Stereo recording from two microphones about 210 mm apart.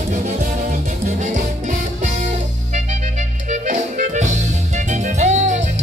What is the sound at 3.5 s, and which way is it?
Music, 35° right (ahead or behind).